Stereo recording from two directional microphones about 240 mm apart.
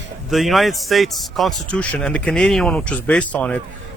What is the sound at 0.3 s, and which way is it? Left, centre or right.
A man's voice, centre.